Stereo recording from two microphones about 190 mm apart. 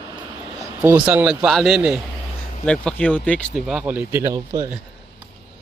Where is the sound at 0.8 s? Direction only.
10° right (ahead or behind).